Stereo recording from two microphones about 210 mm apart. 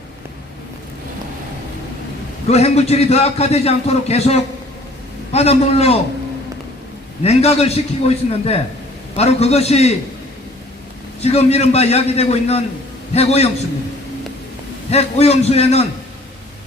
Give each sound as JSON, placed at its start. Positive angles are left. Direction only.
{"t": 2.5, "sound": "a man's voice", "side_deg": 30}
{"t": 7.2, "sound": "a man's voice", "side_deg": 30}
{"t": 11.2, "sound": "a man's voice", "side_deg": 30}
{"t": 14.8, "sound": "a man's voice", "side_deg": 30}